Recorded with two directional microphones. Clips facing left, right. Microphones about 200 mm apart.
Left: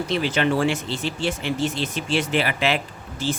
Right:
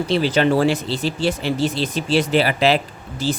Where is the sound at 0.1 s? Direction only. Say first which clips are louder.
Right 5 dB; 35° right (ahead or behind).